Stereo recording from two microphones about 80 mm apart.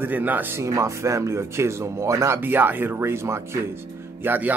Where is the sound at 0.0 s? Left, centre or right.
Right.